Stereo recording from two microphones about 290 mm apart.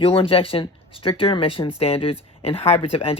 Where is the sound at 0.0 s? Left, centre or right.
Centre.